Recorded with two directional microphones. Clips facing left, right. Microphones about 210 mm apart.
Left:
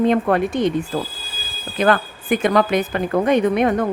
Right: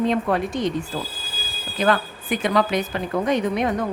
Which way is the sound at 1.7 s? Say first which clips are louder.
Left 3 dB; 55° left (ahead or behind).